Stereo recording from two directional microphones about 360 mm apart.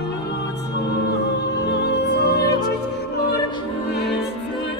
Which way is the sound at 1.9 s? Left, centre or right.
Left.